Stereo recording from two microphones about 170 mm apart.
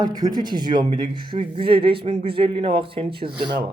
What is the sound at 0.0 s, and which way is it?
Speech, 25° right (ahead or behind).